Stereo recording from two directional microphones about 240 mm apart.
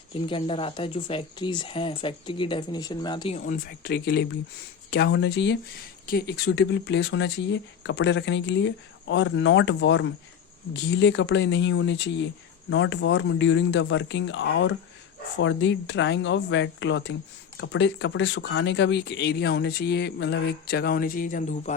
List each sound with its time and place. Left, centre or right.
0.1 s speech: left
3.3 s speech: left